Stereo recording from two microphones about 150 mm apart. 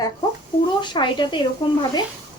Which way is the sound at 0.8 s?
30° left (ahead or behind).